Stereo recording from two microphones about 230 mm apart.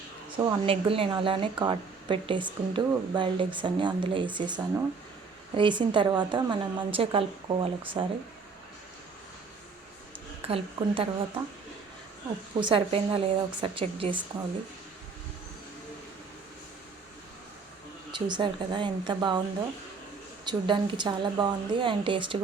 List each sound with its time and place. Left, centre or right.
0.3 s a woman's voice: right
10.4 s a woman's voice: right
12.5 s a woman's voice: right
18.1 s a woman's voice: centre
20.4 s a woman's voice: centre